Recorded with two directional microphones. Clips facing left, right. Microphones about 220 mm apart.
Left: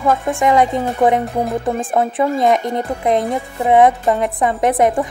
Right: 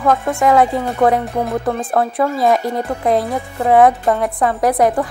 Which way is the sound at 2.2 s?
20° left (ahead or behind).